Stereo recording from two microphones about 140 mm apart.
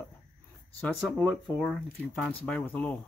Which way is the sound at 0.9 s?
Centre (ahead or behind).